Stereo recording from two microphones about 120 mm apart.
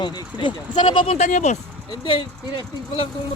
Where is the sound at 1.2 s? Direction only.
75° left (ahead or behind).